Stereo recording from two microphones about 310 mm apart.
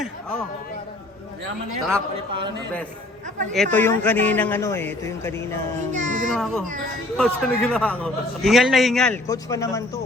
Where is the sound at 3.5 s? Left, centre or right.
Centre.